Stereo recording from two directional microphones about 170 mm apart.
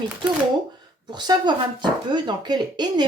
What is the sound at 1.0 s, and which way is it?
Speech, 25° right (ahead or behind).